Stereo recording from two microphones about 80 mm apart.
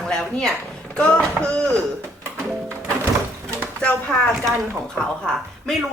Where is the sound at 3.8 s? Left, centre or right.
Centre.